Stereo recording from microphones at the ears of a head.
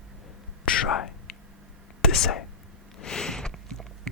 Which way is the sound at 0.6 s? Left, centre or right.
Left.